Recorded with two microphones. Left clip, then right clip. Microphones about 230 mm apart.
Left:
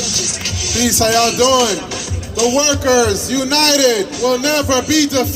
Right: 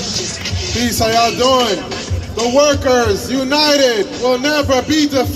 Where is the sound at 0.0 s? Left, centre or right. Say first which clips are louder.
Left 3 dB; left.